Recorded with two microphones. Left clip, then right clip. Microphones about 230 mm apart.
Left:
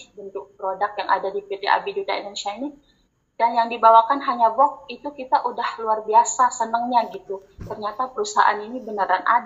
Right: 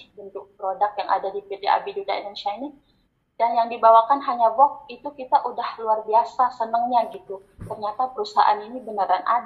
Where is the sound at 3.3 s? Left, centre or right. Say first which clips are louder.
Left 1 dB; centre.